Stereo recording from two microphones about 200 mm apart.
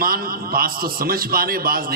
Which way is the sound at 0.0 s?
45° right (ahead or behind).